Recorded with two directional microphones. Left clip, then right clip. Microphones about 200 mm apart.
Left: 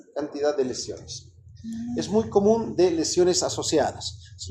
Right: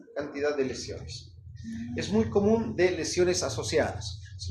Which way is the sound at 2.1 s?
30° left (ahead or behind).